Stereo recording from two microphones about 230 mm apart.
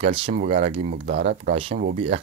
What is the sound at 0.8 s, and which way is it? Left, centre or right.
Speech, right.